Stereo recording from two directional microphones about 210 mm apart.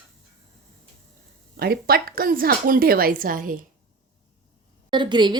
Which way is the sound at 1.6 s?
45° right (ahead or behind).